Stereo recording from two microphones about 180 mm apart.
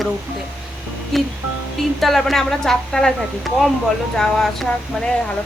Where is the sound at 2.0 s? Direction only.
Centre (ahead or behind).